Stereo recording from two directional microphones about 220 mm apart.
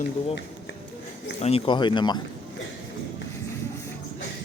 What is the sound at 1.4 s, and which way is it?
Speech, 25° left (ahead or behind).